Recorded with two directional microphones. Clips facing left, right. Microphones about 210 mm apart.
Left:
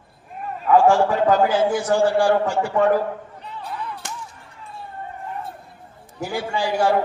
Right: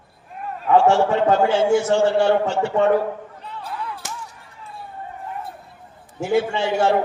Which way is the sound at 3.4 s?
Centre (ahead or behind).